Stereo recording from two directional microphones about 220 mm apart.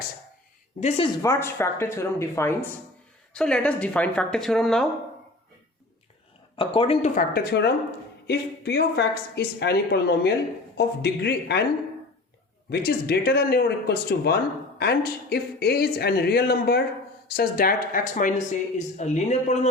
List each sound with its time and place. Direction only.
0.8 s speech: 30° left (ahead or behind)
1.2 s speech: 10° left (ahead or behind)
6.6 s a woman's voice: 25° left (ahead or behind); by 11.6 s 50° left (ahead or behind)
12.7 s a woman's voice: 45° left (ahead or behind); by 19.5 s 30° left (ahead or behind)